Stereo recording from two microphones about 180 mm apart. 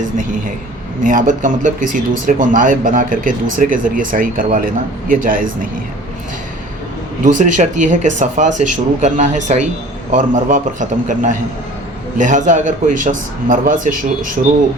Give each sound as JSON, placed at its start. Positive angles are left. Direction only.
{"t": 1.0, "sound": "speech", "side_deg": -50}
{"t": 7.3, "sound": "speech", "side_deg": -45}